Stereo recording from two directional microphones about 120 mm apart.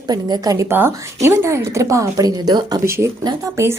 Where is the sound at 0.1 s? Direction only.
30° right (ahead or behind).